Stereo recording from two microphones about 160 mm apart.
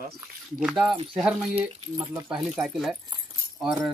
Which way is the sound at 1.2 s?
5° right (ahead or behind).